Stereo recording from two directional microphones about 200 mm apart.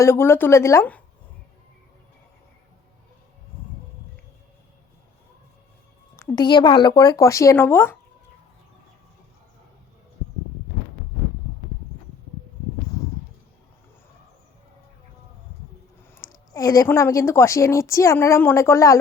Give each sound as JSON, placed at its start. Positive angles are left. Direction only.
{"t": 0.0, "sound": "a woman's voice", "side_deg": 10}
{"t": 6.1, "sound": "a woman's voice", "side_deg": 15}
{"t": 16.1, "sound": "a woman's voice", "side_deg": 20}